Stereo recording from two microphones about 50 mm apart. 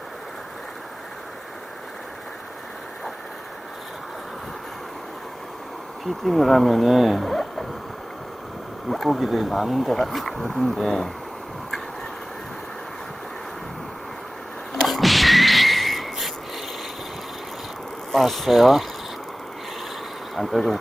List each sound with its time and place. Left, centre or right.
6.2 s speech: centre
8.9 s speech: centre
14.7 s a sound: centre
18.1 s speech: centre
20.3 s speech: centre